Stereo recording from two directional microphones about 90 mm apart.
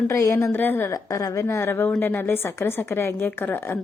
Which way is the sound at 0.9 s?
40° left (ahead or behind).